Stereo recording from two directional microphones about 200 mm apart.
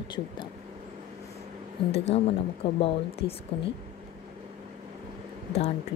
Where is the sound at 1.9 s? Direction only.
30° left (ahead or behind).